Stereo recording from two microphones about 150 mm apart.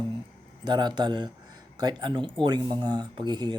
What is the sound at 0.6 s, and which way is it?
Speech, 30° right (ahead or behind).